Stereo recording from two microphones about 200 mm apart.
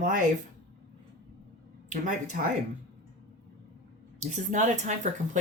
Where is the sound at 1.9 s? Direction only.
40° right (ahead or behind).